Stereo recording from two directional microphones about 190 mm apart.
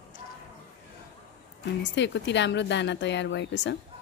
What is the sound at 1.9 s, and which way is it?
Speech, 70° left (ahead or behind).